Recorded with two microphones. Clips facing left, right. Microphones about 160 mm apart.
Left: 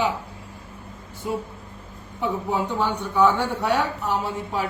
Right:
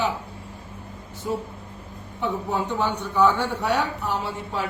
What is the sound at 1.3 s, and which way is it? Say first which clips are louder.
Speech: even; 15° left (ahead or behind).